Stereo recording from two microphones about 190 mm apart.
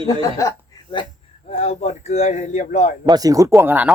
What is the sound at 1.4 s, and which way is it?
Speech, 35° left (ahead or behind).